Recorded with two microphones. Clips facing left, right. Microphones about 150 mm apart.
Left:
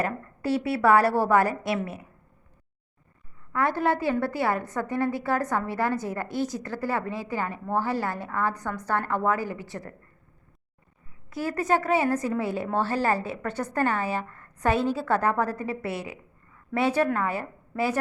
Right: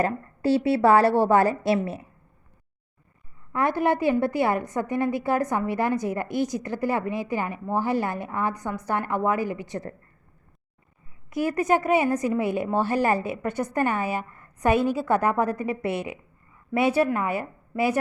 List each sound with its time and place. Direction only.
0.0 s a woman's voice: 30° right (ahead or behind)
3.5 s a woman's voice: 15° right (ahead or behind)
11.3 s a woman's voice: 15° right (ahead or behind)